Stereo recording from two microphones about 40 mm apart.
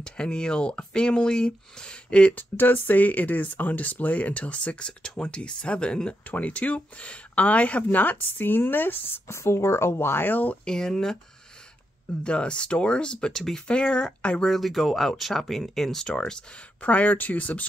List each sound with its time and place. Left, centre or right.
0.0 s speech: left
2.3 s speech: left
6.2 s speech: left
7.9 s speech: left
9.8 s speech: left
10.2 s speech: left
10.6 s speech: centre
12.2 s speech: left
13.3 s speech: centre
13.7 s speech: left
14.6 s speech: centre
16.5 s speech: left